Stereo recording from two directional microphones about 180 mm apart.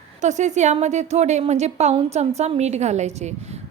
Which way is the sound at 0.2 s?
40° right (ahead or behind).